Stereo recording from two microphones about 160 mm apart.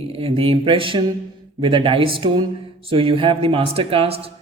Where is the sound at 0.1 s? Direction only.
35° right (ahead or behind).